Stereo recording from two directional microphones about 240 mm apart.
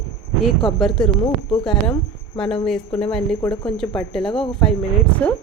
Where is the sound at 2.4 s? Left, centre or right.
Centre.